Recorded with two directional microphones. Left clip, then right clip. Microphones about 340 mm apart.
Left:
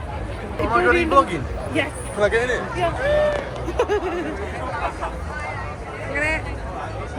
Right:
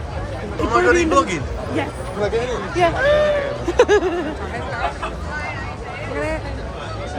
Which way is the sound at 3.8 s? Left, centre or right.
Right.